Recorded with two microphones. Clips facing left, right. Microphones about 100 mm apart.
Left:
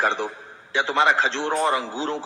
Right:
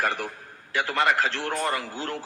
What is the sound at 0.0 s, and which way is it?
A man's voice, 25° left (ahead or behind).